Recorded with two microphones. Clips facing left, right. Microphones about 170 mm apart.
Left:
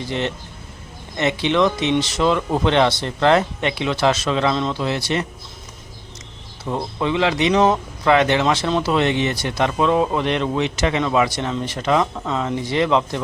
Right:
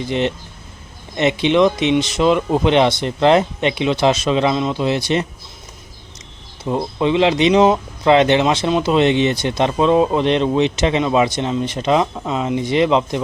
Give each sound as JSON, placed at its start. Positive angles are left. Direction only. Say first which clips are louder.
{"t": 0.0, "sound": "speech", "louder": "right 4 dB", "side_deg": -20}
{"t": 6.7, "sound": "speech", "louder": "right 4 dB", "side_deg": -20}